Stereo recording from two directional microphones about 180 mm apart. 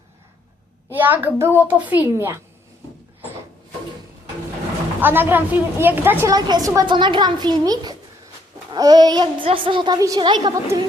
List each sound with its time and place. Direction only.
0.9 s a child's voice: 10° right (ahead or behind)
4.9 s a woman's voice: 10° right (ahead or behind)